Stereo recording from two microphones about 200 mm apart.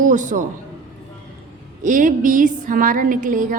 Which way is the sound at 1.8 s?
40° right (ahead or behind).